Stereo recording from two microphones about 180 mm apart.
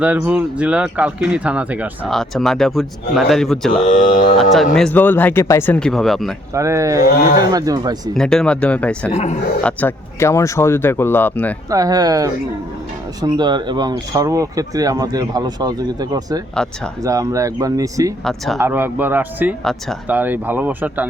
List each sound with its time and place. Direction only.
0.0 s speech: 5° right (ahead or behind)
3.8 s speech: 45° left (ahead or behind)
4.4 s speech: centre (ahead or behind)
6.5 s speech: 15° right (ahead or behind)
8.1 s speech: 5° left (ahead or behind)
11.7 s speech: 20° right (ahead or behind)